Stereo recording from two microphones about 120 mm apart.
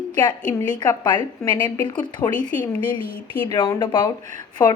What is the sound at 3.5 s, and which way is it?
Speech, 35° left (ahead or behind).